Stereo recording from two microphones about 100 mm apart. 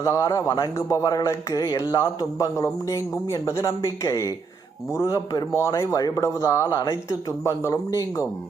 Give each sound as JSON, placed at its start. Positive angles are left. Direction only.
{"t": 0.0, "sound": "a man's voice", "side_deg": 30}